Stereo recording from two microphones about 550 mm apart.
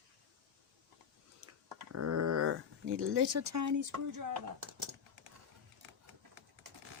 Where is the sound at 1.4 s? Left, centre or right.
Right.